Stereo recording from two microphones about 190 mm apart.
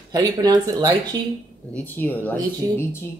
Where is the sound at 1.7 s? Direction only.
10° left (ahead or behind).